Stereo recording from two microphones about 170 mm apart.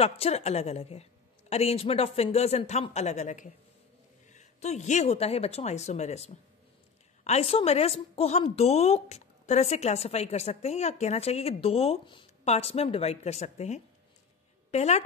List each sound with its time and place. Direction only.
0.0 s a woman's voice: 35° left (ahead or behind)